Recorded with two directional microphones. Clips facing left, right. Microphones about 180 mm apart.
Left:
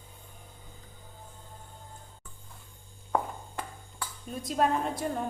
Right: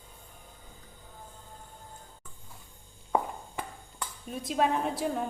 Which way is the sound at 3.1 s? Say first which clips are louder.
Right 1 dB; 5° right (ahead or behind).